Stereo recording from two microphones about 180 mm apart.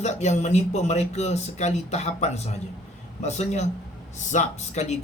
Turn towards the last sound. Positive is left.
turn(degrees=40)  # may be behind; listen again after turning